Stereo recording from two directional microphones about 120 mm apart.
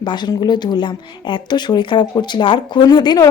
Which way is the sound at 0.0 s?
40° left (ahead or behind).